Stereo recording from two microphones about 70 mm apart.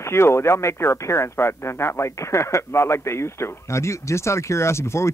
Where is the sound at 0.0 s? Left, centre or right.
Left.